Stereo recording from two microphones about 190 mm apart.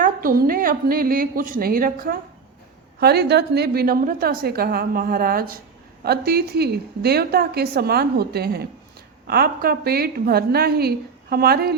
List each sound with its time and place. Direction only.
0.0 s a woman's voice: 50° right (ahead or behind)